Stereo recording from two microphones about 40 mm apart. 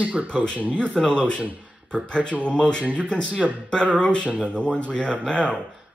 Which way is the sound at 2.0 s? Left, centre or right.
Left.